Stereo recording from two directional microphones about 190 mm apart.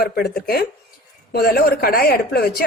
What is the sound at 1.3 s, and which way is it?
A woman's voice, 55° left (ahead or behind).